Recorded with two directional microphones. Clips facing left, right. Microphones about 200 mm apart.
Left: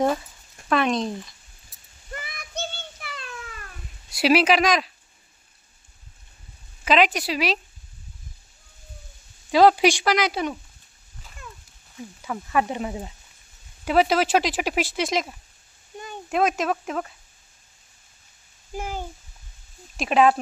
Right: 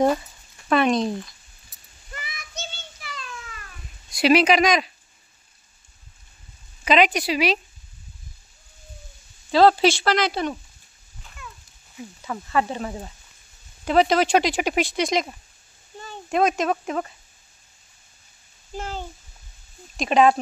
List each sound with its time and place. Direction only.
0.7 s speech: centre (ahead or behind)
2.1 s a sound: 55° left (ahead or behind)
4.1 s speech: 5° left (ahead or behind)
6.8 s speech: centre (ahead or behind)
9.5 s speech: 15° left (ahead or behind)
12.3 s speech: 15° left (ahead or behind)
18.7 s speech: 10° left (ahead or behind)